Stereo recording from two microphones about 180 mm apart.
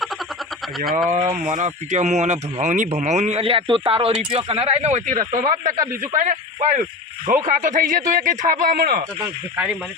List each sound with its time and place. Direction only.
0.9 s speech: centre (ahead or behind)
1.1 s speech: 40° right (ahead or behind)